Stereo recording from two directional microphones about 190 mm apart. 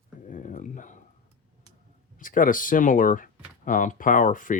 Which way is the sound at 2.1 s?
45° left (ahead or behind).